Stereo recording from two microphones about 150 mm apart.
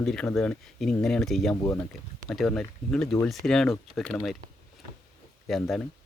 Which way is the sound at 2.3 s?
Centre (ahead or behind).